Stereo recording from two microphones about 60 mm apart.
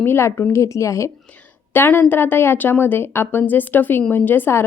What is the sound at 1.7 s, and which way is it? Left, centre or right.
A woman's voice, left.